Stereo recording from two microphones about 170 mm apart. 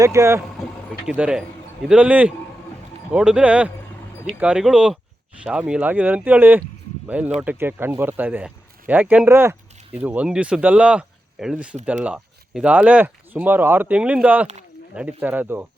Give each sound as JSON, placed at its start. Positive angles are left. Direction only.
{"t": 0.0, "sound": "speech", "side_deg": -15}
{"t": 1.1, "sound": "speech", "side_deg": -5}